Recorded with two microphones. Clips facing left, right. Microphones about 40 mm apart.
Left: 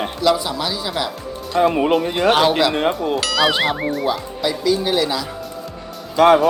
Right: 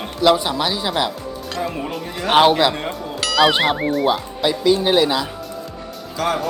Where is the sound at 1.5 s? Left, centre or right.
Left.